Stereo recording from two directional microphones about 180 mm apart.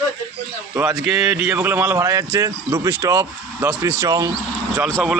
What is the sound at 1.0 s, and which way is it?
Speech, centre (ahead or behind).